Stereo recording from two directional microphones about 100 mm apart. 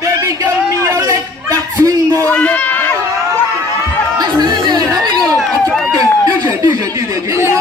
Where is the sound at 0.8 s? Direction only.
35° right (ahead or behind).